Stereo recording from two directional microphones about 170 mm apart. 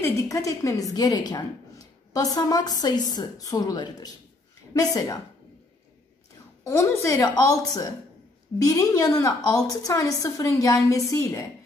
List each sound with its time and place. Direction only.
0.0 s a woman's voice: 20° left (ahead or behind)
6.6 s a woman's voice: 15° left (ahead or behind)
8.6 s a woman's voice: 20° left (ahead or behind)